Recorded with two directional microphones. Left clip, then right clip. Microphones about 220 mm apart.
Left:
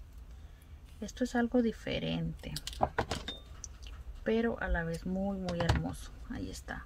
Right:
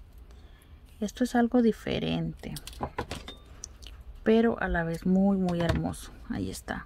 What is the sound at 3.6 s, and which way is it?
Speech, 45° right (ahead or behind).